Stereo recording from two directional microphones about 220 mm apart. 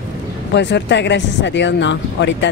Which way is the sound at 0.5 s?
50° left (ahead or behind).